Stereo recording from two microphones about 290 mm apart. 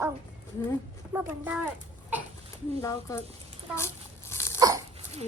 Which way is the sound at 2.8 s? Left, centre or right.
Centre.